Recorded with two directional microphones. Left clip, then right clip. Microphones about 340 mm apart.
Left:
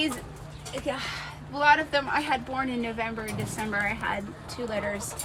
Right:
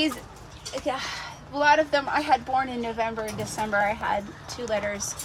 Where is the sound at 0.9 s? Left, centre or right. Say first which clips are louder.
Right 2 dB; right.